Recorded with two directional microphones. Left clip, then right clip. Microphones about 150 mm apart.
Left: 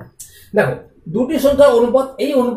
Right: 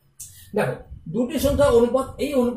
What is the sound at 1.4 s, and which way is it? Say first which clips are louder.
Speech: left 7 dB; 20° right (ahead or behind).